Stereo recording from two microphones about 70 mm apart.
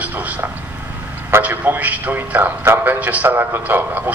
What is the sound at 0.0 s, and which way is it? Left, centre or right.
A man's voice, right.